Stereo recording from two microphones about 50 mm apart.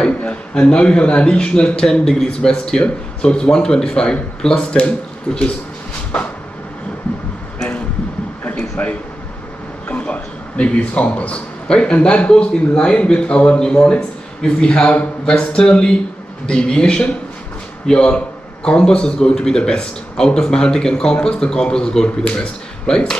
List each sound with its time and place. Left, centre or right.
0.0 s a man's voice: left
8.5 s a sound: left
9.8 s a man's voice: left